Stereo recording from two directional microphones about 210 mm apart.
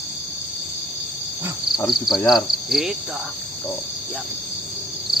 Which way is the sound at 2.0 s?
Centre (ahead or behind).